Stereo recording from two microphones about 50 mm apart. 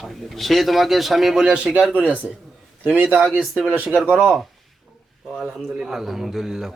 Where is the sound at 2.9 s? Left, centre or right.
Right.